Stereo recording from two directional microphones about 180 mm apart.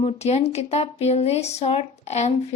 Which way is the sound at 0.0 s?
35° left (ahead or behind).